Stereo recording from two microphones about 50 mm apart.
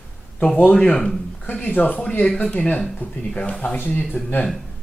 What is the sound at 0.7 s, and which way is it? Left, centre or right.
Speech, centre.